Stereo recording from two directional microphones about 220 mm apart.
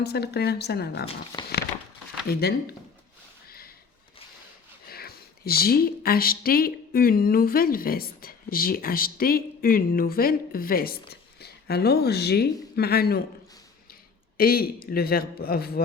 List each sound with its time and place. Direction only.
0.0 s a man's voice: 45° left (ahead or behind)
2.2 s a man's voice: 45° left (ahead or behind)
4.9 s speech: 45° left (ahead or behind)
14.3 s a man's voice: 45° left (ahead or behind)